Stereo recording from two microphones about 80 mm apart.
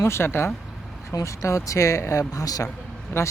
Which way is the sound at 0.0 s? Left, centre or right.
Left.